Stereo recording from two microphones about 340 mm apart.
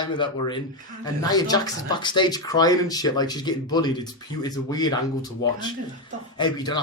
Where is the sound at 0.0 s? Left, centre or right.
Centre.